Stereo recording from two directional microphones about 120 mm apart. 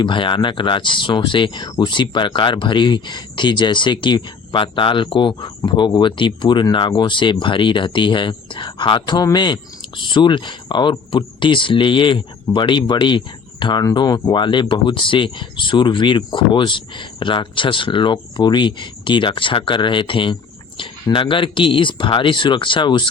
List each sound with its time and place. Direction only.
0.0 s speech: 45° left (ahead or behind)